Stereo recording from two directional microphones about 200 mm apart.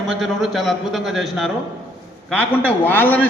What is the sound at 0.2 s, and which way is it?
A man's voice, centre (ahead or behind).